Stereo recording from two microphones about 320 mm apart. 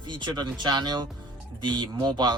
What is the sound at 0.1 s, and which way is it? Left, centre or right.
Speech, centre.